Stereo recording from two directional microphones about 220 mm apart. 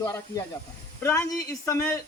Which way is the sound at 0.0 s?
15° left (ahead or behind).